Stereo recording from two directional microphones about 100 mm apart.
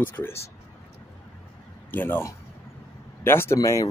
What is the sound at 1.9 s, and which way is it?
Speech, 20° left (ahead or behind).